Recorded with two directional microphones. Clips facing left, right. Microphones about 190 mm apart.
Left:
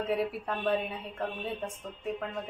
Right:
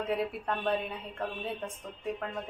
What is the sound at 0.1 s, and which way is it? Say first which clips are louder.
Speech: even; 5° left (ahead or behind).